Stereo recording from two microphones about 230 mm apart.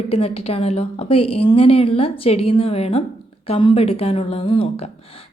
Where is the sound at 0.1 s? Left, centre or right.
Left.